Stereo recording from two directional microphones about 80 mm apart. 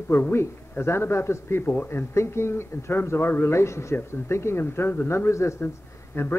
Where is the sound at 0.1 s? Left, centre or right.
Left.